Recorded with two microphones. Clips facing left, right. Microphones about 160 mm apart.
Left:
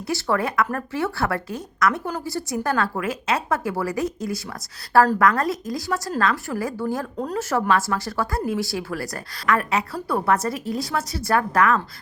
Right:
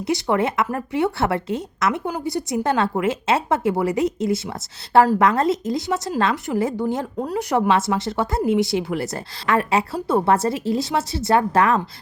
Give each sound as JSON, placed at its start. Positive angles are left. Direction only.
{"t": 0.1, "sound": "a woman's voice", "side_deg": -20}